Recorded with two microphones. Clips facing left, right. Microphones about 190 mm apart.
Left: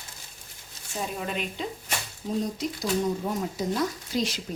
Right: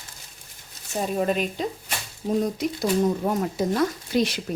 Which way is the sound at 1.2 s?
40° right (ahead or behind).